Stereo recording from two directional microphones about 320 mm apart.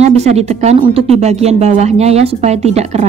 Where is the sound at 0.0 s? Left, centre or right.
Centre.